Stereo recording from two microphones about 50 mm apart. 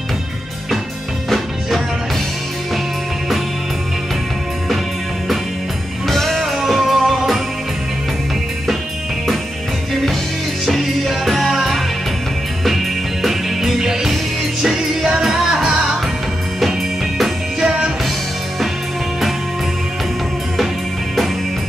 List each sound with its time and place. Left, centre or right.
6.0 s music: centre
10.6 s music: centre
17.6 s music: centre